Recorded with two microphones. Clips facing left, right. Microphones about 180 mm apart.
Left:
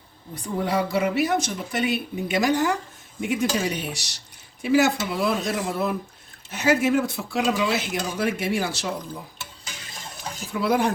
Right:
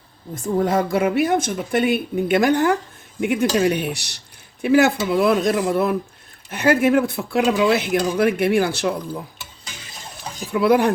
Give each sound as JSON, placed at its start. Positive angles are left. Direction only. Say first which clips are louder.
{"t": 0.3, "sound": "a woman's voice", "louder": "right 5 dB", "side_deg": -45}
{"t": 10.5, "sound": "speech", "louder": "right 6 dB", "side_deg": -60}